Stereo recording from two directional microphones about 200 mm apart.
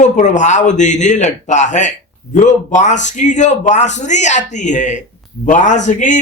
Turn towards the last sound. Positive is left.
turn(degrees=40)  # may be behind; listen again after turning